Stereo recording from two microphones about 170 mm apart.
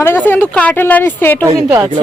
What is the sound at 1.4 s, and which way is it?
Speech, 15° right (ahead or behind).